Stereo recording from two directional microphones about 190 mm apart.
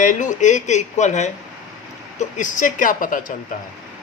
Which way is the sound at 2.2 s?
40° left (ahead or behind).